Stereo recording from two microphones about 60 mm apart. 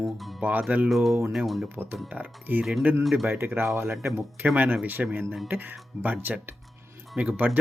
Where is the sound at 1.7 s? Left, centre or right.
Right.